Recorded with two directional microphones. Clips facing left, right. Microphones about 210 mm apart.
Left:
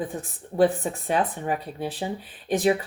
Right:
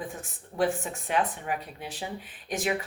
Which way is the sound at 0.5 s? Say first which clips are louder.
Left 6 dB; 35° left (ahead or behind).